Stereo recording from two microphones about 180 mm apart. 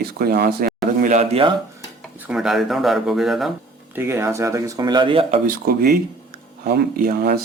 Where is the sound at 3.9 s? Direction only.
15° right (ahead or behind); by 5.4 s 30° right (ahead or behind).